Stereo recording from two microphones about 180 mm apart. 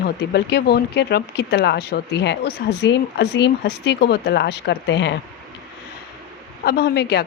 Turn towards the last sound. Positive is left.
turn(degrees=65)  # may be behind; listen again after turning